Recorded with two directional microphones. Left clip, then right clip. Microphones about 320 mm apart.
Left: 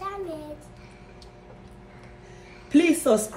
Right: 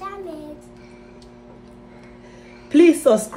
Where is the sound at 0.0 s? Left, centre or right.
Centre.